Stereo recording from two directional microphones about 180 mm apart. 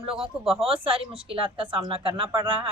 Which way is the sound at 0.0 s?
30° right (ahead or behind).